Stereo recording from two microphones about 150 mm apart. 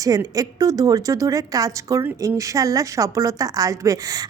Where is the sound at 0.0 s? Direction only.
25° right (ahead or behind).